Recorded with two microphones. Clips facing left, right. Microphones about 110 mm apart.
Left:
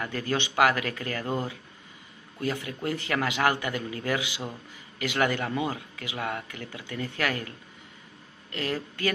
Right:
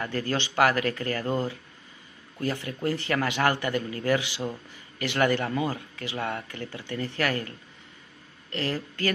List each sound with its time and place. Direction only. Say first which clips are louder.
0.0 s speech: right 1 dB; 15° left (ahead or behind)
8.5 s speech: right 1 dB; 15° left (ahead or behind)